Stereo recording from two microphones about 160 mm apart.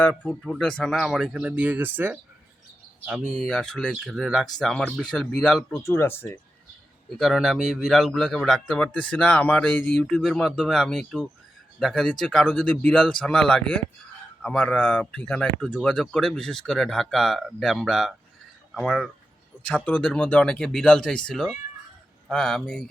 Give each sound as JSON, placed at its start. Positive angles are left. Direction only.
{"t": 0.3, "sound": "speech", "side_deg": 5}
{"t": 3.1, "sound": "speech", "side_deg": 0}
{"t": 5.7, "sound": "speech", "side_deg": 15}
{"t": 7.1, "sound": "speech", "side_deg": 0}